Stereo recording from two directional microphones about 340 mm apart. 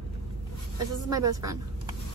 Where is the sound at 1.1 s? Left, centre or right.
Centre.